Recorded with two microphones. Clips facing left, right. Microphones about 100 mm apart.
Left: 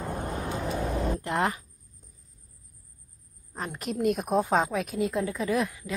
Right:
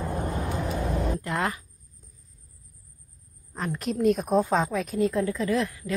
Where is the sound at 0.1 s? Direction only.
40° right (ahead or behind).